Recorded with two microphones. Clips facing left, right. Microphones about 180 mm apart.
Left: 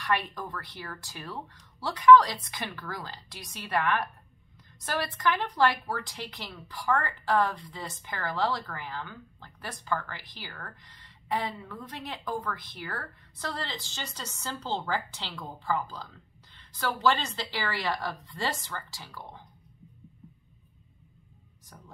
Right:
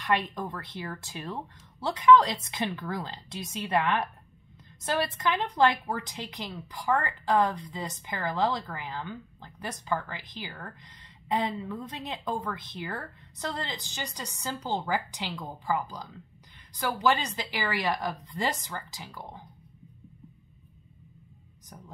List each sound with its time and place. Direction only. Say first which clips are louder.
0.0 s a woman's voice: right 2 dB; 20° right (ahead or behind)